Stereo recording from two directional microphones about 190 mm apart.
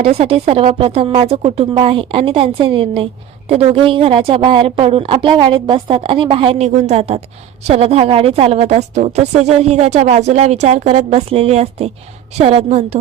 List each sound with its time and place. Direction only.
0.0 s a woman's voice: 30° right (ahead or behind)